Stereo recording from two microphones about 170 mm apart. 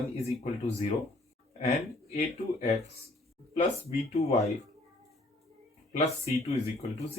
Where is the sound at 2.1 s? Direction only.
40° left (ahead or behind).